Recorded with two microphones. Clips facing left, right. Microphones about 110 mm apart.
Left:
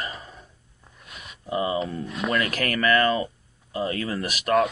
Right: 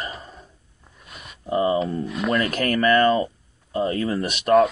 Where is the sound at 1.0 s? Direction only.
Centre (ahead or behind).